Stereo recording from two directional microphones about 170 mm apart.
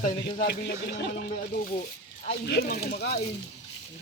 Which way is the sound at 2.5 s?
70° left (ahead or behind).